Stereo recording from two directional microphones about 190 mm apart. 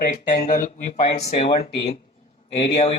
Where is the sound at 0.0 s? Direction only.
45° left (ahead or behind).